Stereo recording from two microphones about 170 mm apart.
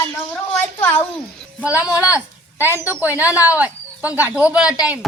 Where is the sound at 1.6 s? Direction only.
10° right (ahead or behind).